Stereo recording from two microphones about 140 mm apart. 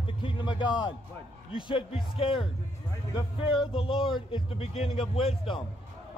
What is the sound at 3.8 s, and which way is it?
A man's voice, 35° left (ahead or behind).